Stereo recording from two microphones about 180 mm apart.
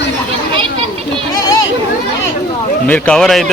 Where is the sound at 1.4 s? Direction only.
20° left (ahead or behind).